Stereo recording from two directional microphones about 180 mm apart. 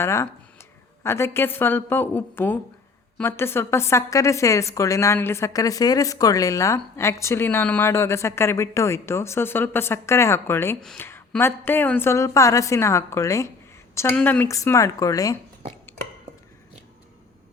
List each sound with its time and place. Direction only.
0.0 s a woman's voice: 15° left (ahead or behind)